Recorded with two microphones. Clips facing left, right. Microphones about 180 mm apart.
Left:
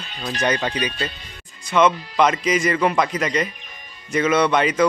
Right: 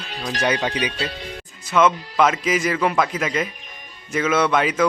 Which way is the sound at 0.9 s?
80° right.